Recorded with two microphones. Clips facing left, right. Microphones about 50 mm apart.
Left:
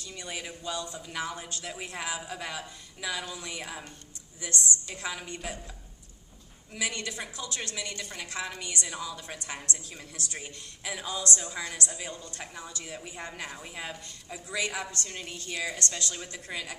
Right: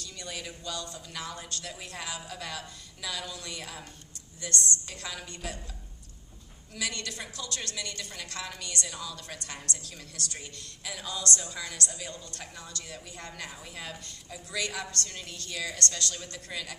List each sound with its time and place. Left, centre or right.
0.0 s a man's voice: centre
6.7 s a man's voice: centre